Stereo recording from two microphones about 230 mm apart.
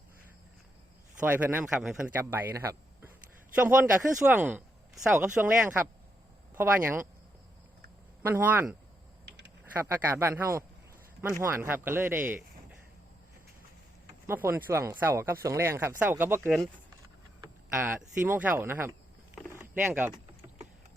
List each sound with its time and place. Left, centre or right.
1.2 s speech: centre
8.2 s speech: centre
9.3 s typing: right
9.7 s speech: centre
14.3 s speech: centre
17.4 s speech: centre
19.5 s a sound: centre